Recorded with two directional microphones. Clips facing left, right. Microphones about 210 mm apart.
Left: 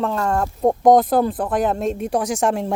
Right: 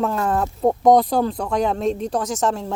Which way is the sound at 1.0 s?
50° left (ahead or behind).